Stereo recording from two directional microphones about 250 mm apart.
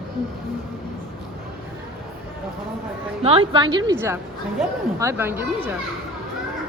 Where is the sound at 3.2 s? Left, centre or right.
Right.